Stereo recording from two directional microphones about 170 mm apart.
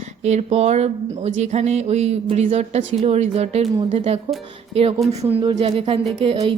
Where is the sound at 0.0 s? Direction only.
40° right (ahead or behind).